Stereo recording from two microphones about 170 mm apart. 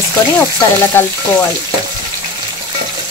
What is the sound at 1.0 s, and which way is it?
Speech, 15° left (ahead or behind).